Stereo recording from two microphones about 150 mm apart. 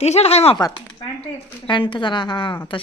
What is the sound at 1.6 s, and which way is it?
A woman's voice, 35° left (ahead or behind).